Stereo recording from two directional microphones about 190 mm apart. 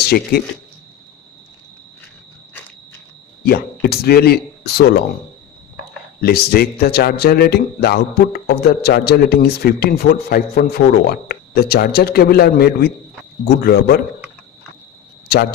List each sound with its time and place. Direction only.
0.0 s speech: 55° left (ahead or behind)
3.4 s a man's voice: 55° left (ahead or behind)
6.2 s a man's voice: 55° left (ahead or behind)